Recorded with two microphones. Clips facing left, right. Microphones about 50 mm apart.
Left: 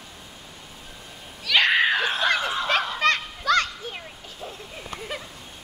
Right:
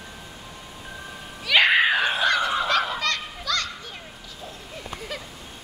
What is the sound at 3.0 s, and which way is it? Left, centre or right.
Fowl, left.